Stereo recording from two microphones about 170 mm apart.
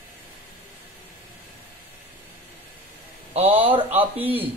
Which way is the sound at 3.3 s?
35° right (ahead or behind).